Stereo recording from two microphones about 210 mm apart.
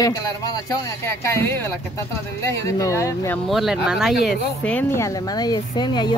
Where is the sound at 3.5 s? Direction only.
Centre (ahead or behind).